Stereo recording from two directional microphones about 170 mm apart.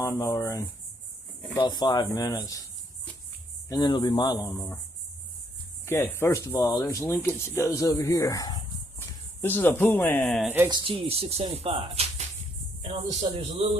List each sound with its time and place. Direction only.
0.0 s speech: 15° left (ahead or behind)
3.7 s speech: 25° left (ahead or behind)
5.8 s speech: 10° left (ahead or behind)
9.4 s speech: 10° left (ahead or behind)
10.4 s speech: 10° right (ahead or behind)
10.7 s speech: 30° right (ahead or behind)